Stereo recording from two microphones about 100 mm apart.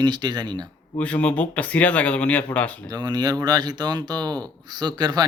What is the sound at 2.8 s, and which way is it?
Speech, 40° right (ahead or behind).